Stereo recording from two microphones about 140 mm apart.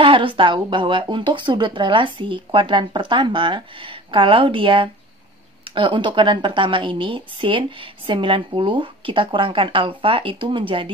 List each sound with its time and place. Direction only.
0.0 s a woman's voice: 40° right (ahead or behind)